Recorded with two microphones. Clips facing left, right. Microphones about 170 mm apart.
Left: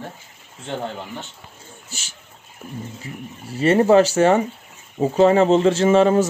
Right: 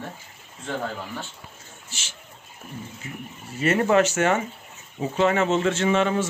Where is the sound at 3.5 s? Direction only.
30° left (ahead or behind).